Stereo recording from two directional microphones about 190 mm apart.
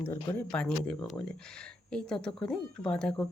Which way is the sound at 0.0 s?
10° left (ahead or behind).